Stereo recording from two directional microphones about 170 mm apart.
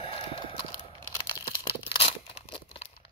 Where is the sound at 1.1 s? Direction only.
30° left (ahead or behind).